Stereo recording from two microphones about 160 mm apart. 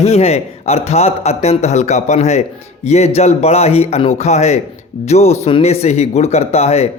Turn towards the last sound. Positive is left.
turn(degrees=40)  # may be behind; listen again after turning